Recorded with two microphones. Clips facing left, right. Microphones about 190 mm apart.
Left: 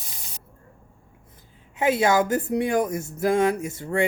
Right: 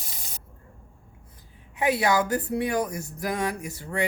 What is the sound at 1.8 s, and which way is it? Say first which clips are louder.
Speech: left 3 dB; 20° left (ahead or behind).